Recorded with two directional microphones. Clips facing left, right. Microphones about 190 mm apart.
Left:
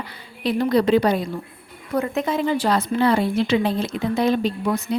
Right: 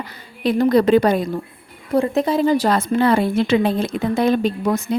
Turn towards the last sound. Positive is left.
turn(degrees=-50)  # may be behind; listen again after turning